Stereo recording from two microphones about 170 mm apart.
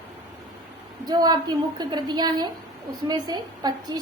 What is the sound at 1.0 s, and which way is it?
A woman's voice, 25° right (ahead or behind).